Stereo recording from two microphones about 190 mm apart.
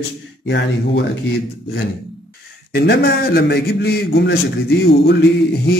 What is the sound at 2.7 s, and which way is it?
A man's voice, 55° left (ahead or behind).